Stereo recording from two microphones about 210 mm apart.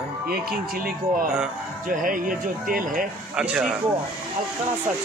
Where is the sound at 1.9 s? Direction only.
40° right (ahead or behind).